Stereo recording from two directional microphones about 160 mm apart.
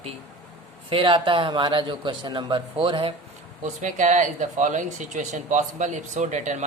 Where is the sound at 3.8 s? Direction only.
50° right (ahead or behind).